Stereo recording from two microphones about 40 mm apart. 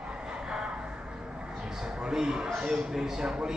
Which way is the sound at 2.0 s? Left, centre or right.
Centre.